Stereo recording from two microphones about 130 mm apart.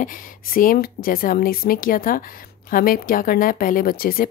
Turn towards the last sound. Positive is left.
turn(degrees=90)